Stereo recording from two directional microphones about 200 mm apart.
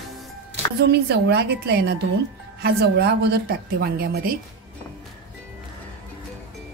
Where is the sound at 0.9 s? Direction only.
55° right (ahead or behind).